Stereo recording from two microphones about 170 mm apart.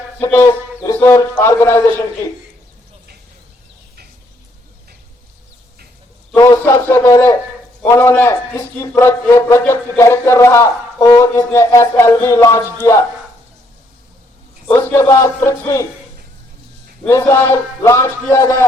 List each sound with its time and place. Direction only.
0.2 s a man's voice: 15° left (ahead or behind)
6.3 s a man's voice: 15° left (ahead or behind)
14.7 s a man's voice: 15° left (ahead or behind)
17.0 s a man's voice: 15° left (ahead or behind)